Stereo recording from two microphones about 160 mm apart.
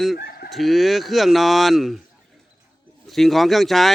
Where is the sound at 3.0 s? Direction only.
Centre (ahead or behind).